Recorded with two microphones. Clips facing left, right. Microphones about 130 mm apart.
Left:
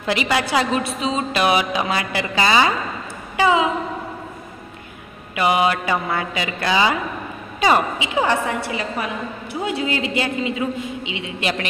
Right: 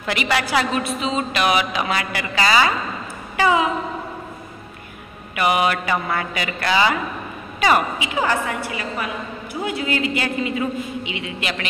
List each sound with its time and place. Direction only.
0.0 s a woman's voice: 25° left (ahead or behind)
5.3 s a woman's voice: 25° left (ahead or behind)